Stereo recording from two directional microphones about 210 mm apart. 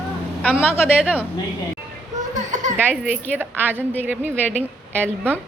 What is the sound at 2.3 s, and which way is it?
Children playing, 35° right (ahead or behind).